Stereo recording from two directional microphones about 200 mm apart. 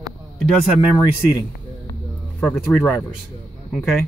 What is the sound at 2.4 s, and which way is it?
Speech, 10° left (ahead or behind).